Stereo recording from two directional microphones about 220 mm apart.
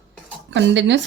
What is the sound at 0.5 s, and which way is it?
Speech, 55° right (ahead or behind).